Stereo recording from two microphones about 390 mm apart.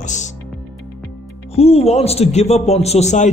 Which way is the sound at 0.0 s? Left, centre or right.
Centre.